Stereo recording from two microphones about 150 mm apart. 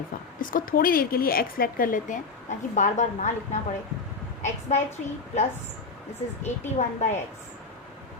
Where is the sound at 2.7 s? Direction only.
55° left (ahead or behind).